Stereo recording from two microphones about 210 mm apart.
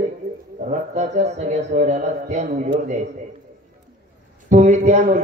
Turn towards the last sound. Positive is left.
turn(degrees=-35)  # may be behind; listen again after turning